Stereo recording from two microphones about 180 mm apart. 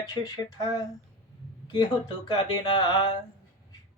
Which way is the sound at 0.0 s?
20° left (ahead or behind).